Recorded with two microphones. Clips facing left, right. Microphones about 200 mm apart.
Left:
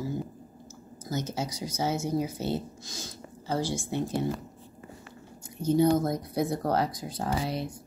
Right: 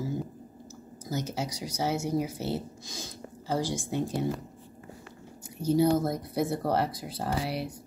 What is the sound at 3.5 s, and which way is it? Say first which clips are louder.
Speech: even; 15° right (ahead or behind).